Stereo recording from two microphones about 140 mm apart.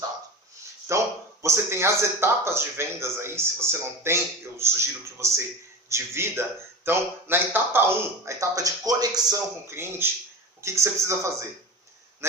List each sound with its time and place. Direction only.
0.9 s a man's voice: 20° right (ahead or behind)